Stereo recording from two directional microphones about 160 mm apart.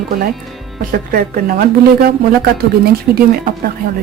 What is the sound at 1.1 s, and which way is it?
Speech, 65° right (ahead or behind).